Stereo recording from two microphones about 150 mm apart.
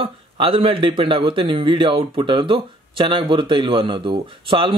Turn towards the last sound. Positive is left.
turn(degrees=-35)  # may be behind; listen again after turning